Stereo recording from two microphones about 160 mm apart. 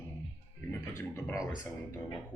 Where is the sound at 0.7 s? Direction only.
20° left (ahead or behind).